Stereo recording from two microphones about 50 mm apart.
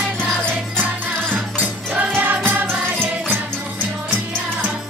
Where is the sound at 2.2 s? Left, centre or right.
Right.